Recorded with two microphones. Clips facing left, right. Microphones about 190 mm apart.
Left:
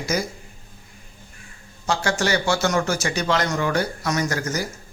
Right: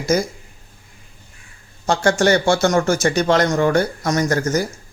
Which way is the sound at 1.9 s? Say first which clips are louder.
Right 7 dB; 50° right (ahead or behind).